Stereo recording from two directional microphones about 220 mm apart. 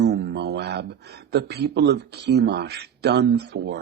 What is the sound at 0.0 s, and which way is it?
Speech, 50° right (ahead or behind).